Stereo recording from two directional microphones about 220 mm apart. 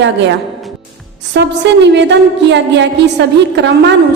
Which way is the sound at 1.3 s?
50° right (ahead or behind).